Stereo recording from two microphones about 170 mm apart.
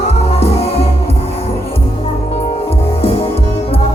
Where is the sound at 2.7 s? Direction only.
35° left (ahead or behind).